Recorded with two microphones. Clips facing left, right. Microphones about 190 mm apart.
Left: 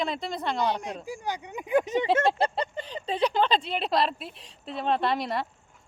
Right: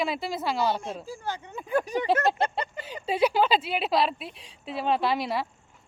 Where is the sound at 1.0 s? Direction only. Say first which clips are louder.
Left 1 dB; 15° left (ahead or behind).